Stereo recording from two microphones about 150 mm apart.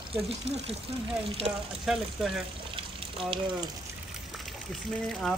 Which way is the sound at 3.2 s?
35° right (ahead or behind).